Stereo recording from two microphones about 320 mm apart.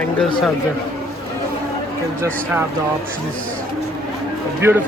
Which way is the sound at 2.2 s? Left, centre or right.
Centre.